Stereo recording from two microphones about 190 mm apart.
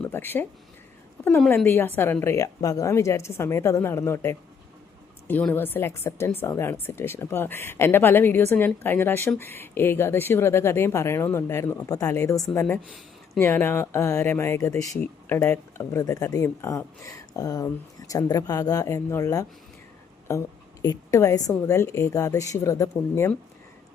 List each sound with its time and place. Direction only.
0.0 s speech: 10° left (ahead or behind)
1.5 s speech: 10° left (ahead or behind)
20.8 s speech: 15° left (ahead or behind)